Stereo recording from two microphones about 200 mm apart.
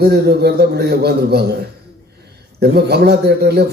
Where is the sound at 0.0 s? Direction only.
55° right (ahead or behind).